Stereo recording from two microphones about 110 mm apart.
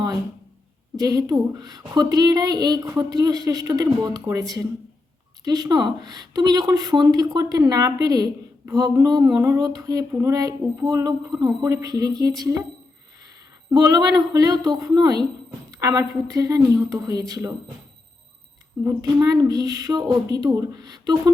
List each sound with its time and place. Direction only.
0.9 s a woman's voice: 35° right (ahead or behind)
13.7 s a woman's voice: 40° right (ahead or behind)
18.9 s a woman's voice: 35° right (ahead or behind)